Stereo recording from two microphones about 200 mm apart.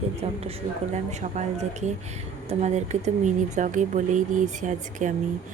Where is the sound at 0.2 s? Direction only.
30° right (ahead or behind).